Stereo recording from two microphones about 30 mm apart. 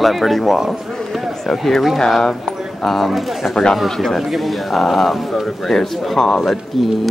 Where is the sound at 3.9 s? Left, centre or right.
Centre.